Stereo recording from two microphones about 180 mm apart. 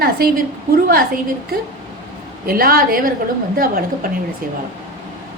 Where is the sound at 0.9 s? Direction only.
55° right (ahead or behind).